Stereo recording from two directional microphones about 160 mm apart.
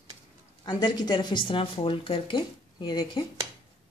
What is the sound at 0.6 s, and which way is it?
Speech, 25° left (ahead or behind).